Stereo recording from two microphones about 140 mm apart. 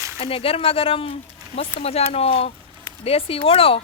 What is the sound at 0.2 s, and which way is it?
A woman's voice, 45° left (ahead or behind).